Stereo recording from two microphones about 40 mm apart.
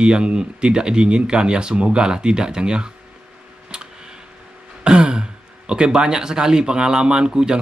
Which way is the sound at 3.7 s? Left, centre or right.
Right.